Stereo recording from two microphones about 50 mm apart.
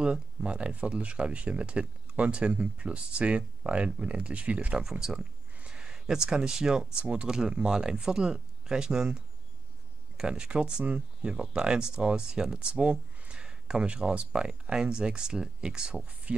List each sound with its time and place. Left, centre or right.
0.0 s speech: centre
4.8 s speech: centre